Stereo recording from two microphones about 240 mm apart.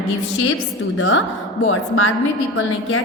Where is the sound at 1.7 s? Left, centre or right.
Left.